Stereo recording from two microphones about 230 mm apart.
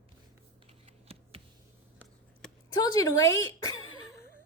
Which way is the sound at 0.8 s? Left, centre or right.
Right.